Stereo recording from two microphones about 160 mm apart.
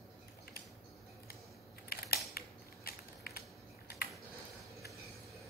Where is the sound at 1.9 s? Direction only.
75° left (ahead or behind).